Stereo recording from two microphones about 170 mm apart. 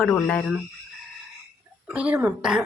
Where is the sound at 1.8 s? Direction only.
10° right (ahead or behind).